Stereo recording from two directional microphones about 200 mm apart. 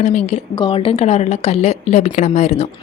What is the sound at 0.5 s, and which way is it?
A woman's voice, 25° left (ahead or behind).